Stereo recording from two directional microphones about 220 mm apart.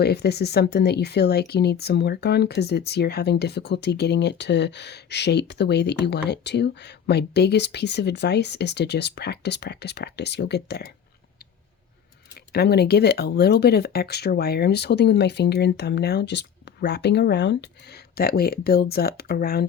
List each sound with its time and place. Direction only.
0.0 s speech: 45° left (ahead or behind)
12.5 s speech: 50° left (ahead or behind)